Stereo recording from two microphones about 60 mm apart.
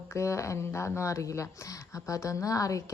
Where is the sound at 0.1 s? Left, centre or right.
Left.